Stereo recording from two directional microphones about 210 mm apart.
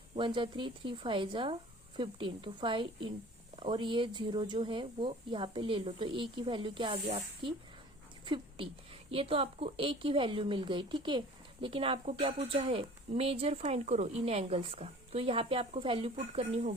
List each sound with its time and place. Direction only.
0.2 s speech: 25° right (ahead or behind)